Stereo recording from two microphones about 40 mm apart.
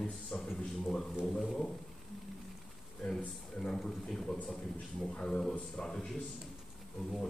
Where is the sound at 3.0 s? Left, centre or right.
Left.